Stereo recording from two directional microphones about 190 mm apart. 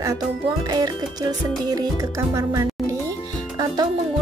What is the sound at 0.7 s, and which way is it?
Music, 20° right (ahead or behind).